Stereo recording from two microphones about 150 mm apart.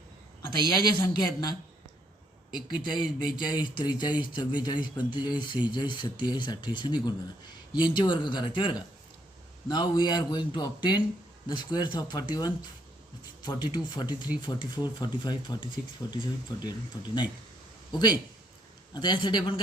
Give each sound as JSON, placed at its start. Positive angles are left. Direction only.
{"t": 0.9, "sound": "speech", "side_deg": 30}